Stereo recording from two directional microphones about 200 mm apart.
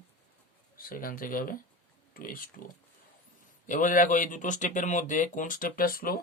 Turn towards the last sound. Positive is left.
turn(degrees=45)  # may be behind; listen again after turning